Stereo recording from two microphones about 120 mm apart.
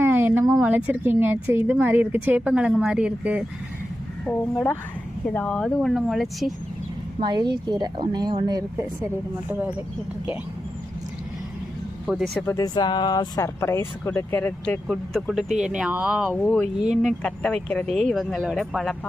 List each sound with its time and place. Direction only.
0.0 s a sound: 20° right (ahead or behind)
0.6 s speech: 15° right (ahead or behind)
4.3 s speech: 5° left (ahead or behind)
7.2 s speech: 35° right (ahead or behind)
9.5 s speech: 15° right (ahead or behind)
12.0 s speech: 5° right (ahead or behind)
12.5 s speech: 30° left (ahead or behind)
14.8 s speech: centre (ahead or behind)
16.3 s speech: 10° left (ahead or behind)